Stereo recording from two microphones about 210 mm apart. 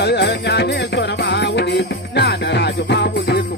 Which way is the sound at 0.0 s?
50° left (ahead or behind).